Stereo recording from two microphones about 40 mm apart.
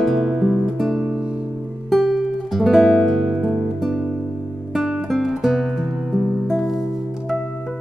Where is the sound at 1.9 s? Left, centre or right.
Centre.